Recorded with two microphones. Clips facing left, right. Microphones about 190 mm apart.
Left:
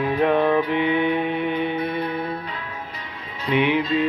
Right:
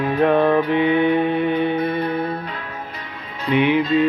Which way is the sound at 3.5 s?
45° right (ahead or behind).